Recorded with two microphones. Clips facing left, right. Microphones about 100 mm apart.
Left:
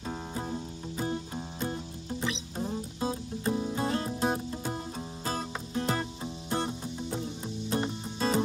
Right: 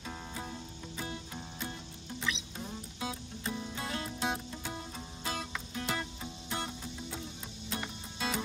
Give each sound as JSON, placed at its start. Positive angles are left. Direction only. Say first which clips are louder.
{"t": 0.0, "sound": "music", "louder": "left 6 dB", "side_deg": 30}